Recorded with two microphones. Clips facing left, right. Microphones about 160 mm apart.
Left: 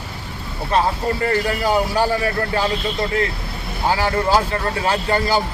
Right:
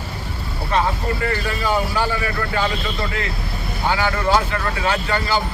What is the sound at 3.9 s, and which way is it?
Speech, 35° left (ahead or behind).